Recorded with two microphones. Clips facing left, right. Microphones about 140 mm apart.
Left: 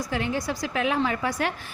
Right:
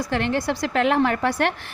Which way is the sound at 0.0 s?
70° right (ahead or behind).